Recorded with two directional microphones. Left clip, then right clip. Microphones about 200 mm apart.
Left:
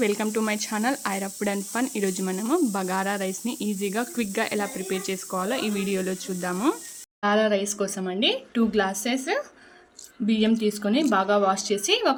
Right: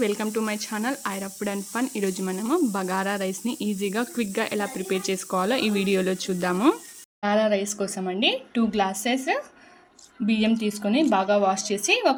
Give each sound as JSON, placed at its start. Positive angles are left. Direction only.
{"t": 0.0, "sound": "speech", "side_deg": 5}
{"t": 4.9, "sound": "speech", "side_deg": -15}
{"t": 7.2, "sound": "a woman's voice", "side_deg": -5}